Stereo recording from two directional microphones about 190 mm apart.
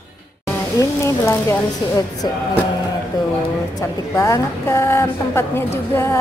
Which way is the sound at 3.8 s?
15° left (ahead or behind).